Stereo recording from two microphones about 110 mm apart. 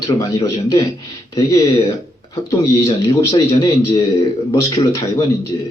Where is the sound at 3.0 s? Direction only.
30° left (ahead or behind).